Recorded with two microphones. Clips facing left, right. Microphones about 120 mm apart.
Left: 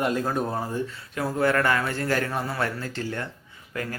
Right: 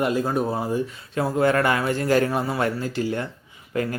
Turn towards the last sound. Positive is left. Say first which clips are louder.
# right 7 dB
turn(degrees=-25)  # may be behind; listen again after turning